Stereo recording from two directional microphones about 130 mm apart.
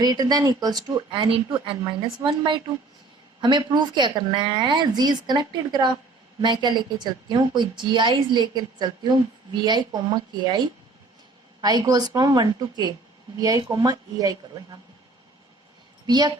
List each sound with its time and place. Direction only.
0.0 s a woman's voice: 30° right (ahead or behind)
16.0 s a woman's voice: 30° right (ahead or behind)